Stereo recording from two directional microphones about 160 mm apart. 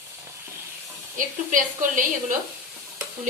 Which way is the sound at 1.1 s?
55° right (ahead or behind).